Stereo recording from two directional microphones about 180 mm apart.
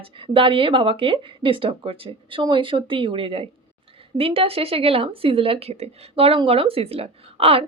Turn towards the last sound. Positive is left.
turn(degrees=-30)  # may be behind; listen again after turning